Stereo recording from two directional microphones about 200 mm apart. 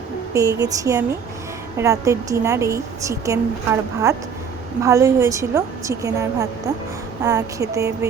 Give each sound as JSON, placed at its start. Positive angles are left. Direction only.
{"t": 0.6, "sound": "a woman's voice", "side_deg": -15}